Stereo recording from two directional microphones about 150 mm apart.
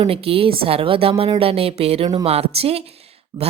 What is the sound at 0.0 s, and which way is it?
A woman's voice, 40° right (ahead or behind).